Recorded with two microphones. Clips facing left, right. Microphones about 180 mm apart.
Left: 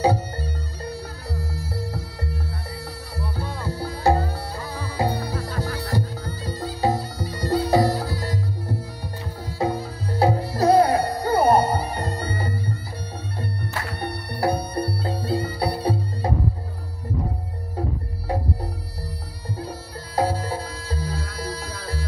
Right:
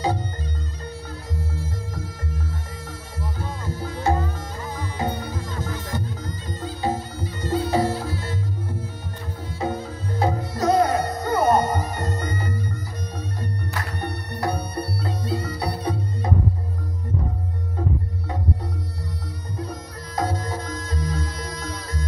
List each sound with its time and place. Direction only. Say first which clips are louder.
0.0 s music: left 4 dB; 35° left (ahead or behind)
11.7 s music: left 1 dB; 10° left (ahead or behind)
14.4 s music: left 4 dB; 30° left (ahead or behind)
20.2 s music: left 3 dB; 30° left (ahead or behind)